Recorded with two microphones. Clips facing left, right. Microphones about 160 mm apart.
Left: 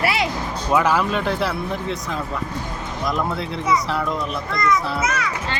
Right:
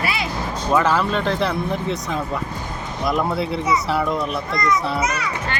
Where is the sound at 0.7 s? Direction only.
10° left (ahead or behind).